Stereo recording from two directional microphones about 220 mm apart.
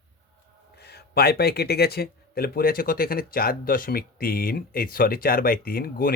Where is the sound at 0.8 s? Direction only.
45° left (ahead or behind).